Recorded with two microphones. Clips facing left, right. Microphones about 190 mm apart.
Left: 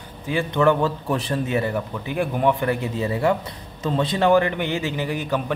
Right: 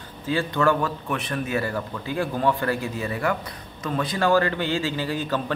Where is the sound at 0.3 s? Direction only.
15° left (ahead or behind).